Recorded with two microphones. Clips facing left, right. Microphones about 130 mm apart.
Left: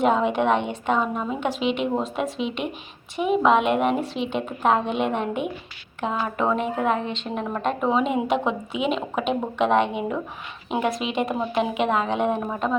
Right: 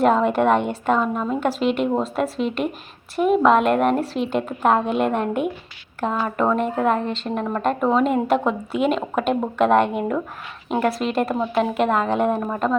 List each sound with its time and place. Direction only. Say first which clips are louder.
0.0 s speech: right 3 dB; centre (ahead or behind)